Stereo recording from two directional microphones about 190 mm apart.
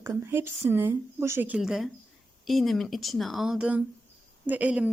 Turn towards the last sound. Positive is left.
turn(degrees=-5)  # may be behind; listen again after turning